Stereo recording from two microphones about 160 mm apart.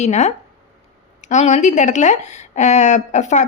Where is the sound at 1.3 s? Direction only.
45° left (ahead or behind).